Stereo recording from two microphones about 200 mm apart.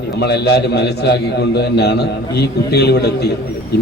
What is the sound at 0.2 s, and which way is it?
A man's voice, 55° left (ahead or behind).